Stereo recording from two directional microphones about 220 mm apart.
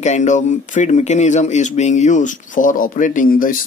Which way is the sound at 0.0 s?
30° left (ahead or behind).